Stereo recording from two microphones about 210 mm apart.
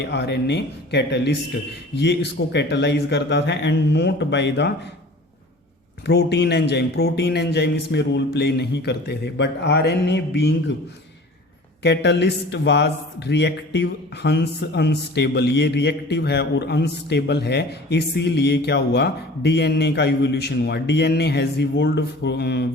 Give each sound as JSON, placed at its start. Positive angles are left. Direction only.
{"t": 0.1, "sound": "speech", "side_deg": 55}
{"t": 6.1, "sound": "speech", "side_deg": 50}
{"t": 11.8, "sound": "speech", "side_deg": 55}